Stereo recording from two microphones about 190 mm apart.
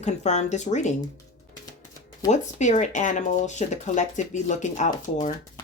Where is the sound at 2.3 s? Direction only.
40° left (ahead or behind).